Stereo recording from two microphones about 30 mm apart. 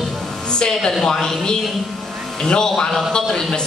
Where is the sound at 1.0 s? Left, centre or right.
Centre.